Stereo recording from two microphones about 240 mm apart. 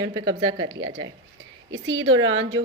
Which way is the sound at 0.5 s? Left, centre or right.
Right.